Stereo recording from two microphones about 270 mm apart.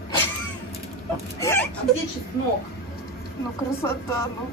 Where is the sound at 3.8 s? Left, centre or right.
Centre.